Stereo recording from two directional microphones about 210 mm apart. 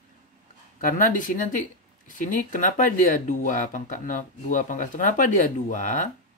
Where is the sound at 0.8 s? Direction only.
40° left (ahead or behind).